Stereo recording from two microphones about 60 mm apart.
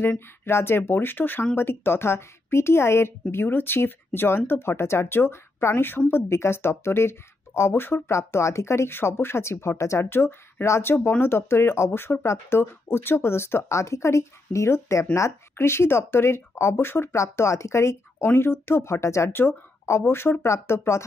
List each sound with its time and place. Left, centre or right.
0.0 s speech: left
17.1 s speech: left
18.3 s speech: left